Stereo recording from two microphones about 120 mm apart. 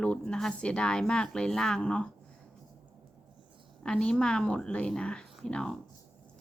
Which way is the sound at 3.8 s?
5° left (ahead or behind).